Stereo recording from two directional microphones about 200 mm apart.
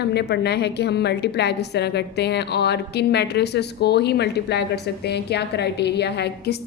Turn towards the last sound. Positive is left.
turn(degrees=55)  # may be behind; listen again after turning